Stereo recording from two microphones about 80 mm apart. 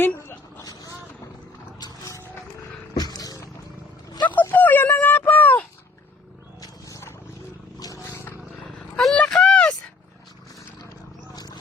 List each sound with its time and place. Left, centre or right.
0.2 s dog: left
0.6 s vehicle: left
2.9 s roaring cats: left
4.1 s dog: left
4.4 s dog: left
6.6 s a sound: left
7.8 s roaring cats: left
9.0 s a sound: centre
11.3 s a sound: left